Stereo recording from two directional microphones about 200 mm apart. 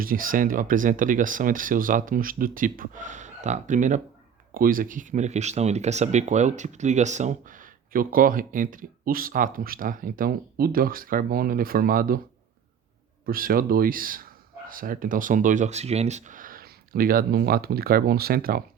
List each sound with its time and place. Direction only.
0.0 s speech: 45° right (ahead or behind)
13.2 s speech: 45° right (ahead or behind)